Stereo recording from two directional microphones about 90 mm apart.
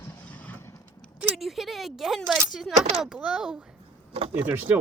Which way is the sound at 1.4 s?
Centre (ahead or behind).